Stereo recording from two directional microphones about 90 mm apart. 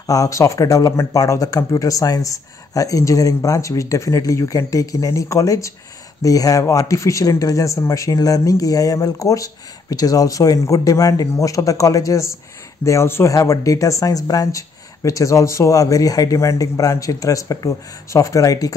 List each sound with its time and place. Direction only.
0.0 s speech: 40° left (ahead or behind)